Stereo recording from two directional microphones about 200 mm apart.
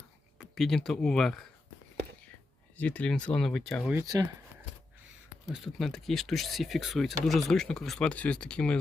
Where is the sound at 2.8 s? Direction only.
5° left (ahead or behind).